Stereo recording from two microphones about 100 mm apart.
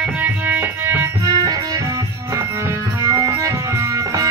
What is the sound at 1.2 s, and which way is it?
Music, 40° right (ahead or behind).